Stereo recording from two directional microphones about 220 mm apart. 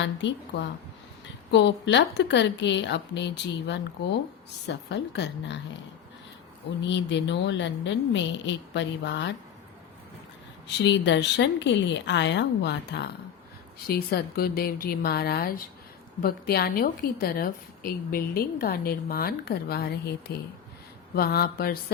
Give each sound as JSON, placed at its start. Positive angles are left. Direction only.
{"t": 0.0, "sound": "a woman's voice", "side_deg": 55}
{"t": 6.8, "sound": "a woman's voice", "side_deg": 55}
{"t": 10.8, "sound": "a woman's voice", "side_deg": 55}